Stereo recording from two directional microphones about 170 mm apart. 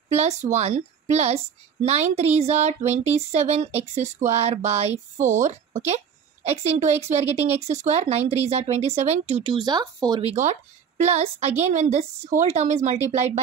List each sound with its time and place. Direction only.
0.1 s speech: 40° right (ahead or behind); by 10.2 s 25° right (ahead or behind)
10.2 s speech: 45° right (ahead or behind)